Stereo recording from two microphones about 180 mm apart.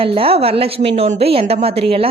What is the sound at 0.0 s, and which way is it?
Speech, 30° right (ahead or behind).